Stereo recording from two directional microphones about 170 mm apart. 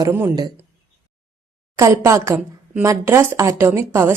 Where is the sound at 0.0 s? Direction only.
15° right (ahead or behind).